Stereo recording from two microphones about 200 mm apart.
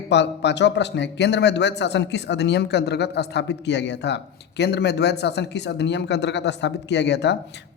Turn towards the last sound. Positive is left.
turn(degrees=60)  # may be behind; listen again after turning